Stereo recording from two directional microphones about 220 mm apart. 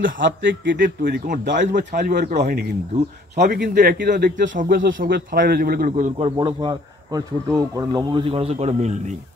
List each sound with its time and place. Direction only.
0.0 s a man's voice: 55° right (ahead or behind)
1.6 s a man's voice: 35° right (ahead or behind)